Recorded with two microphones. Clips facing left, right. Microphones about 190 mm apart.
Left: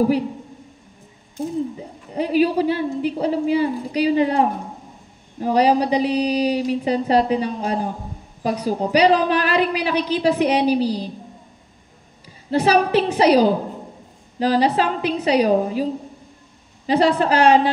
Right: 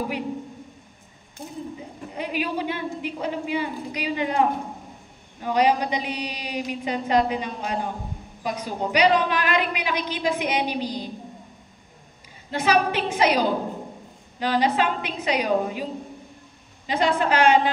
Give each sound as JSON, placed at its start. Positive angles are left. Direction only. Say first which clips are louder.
{"t": 2.1, "sound": "a woman's voice", "louder": "left 10 dB", "side_deg": 35}
{"t": 12.4, "sound": "a woman's voice", "louder": "left 5 dB", "side_deg": 35}